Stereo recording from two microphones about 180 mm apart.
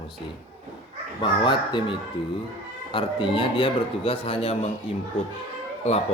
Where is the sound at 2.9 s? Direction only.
30° left (ahead or behind).